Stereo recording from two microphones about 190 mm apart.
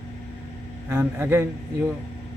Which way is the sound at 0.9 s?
10° right (ahead or behind).